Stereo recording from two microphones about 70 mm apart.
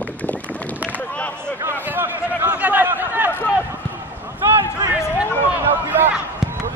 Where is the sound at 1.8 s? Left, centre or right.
Right.